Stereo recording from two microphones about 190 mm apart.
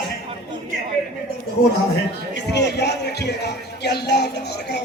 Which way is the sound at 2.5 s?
60° left (ahead or behind).